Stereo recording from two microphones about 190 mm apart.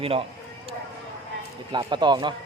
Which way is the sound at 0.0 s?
30° right (ahead or behind).